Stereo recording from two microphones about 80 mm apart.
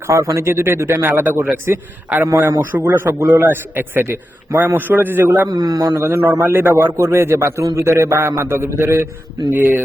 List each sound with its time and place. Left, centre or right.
0.1 s a man's voice: right
5.5 s a man's voice: right
6.4 s a man's voice: right